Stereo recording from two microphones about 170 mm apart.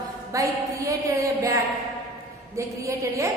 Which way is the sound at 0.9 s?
20° right (ahead or behind).